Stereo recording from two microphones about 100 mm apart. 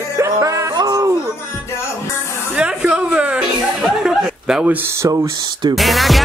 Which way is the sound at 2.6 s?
10° right (ahead or behind).